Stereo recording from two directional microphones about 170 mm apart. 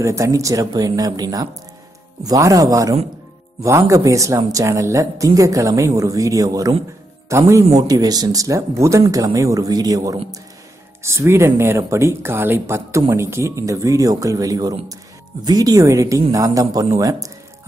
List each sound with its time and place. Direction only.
0.0 s speech: 20° right (ahead or behind)